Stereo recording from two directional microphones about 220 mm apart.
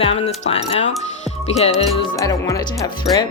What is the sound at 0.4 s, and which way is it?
Speech, 30° left (ahead or behind).